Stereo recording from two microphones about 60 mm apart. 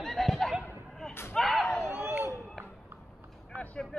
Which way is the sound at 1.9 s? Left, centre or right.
Right.